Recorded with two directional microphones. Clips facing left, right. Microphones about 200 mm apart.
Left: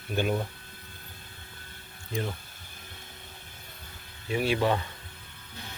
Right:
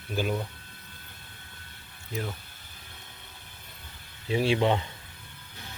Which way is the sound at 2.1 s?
5° right (ahead or behind).